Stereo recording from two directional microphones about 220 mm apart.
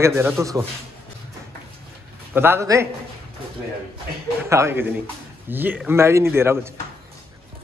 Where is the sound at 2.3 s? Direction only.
10° right (ahead or behind).